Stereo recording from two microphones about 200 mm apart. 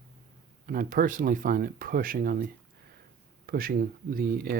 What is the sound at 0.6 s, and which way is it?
Speech, 45° right (ahead or behind).